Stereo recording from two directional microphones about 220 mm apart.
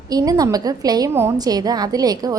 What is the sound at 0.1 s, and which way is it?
A woman's voice, 15° right (ahead or behind).